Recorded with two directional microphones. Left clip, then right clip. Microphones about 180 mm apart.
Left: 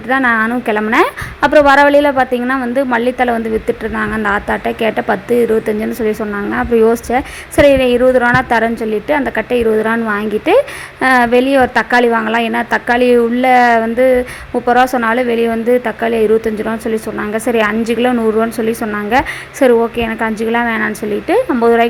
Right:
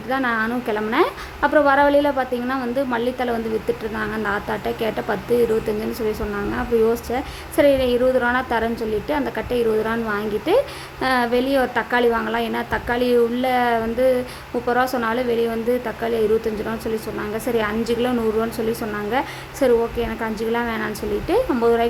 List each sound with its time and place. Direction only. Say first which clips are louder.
0.1 s a woman's voice: left 9 dB; 25° left (ahead or behind)
17.3 s a woman's voice: left 8 dB; 25° left (ahead or behind)